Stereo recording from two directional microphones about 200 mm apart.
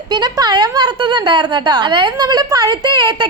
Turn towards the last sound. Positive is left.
turn(degrees=-25)  # may be behind; listen again after turning